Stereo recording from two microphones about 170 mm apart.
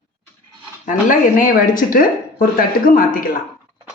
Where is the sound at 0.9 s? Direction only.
50° left (ahead or behind).